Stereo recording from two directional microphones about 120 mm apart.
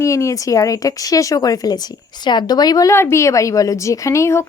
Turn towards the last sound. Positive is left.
turn(degrees=25)  # may be behind; listen again after turning